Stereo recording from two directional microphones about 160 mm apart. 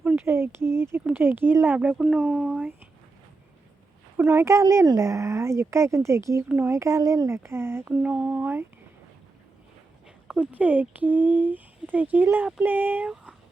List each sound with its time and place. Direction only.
0.0 s speech: 15° right (ahead or behind)
4.2 s speech: 15° right (ahead or behind)
10.2 s speech: 10° right (ahead or behind)